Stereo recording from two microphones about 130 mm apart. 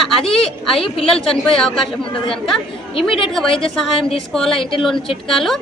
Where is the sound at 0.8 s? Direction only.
45° left (ahead or behind).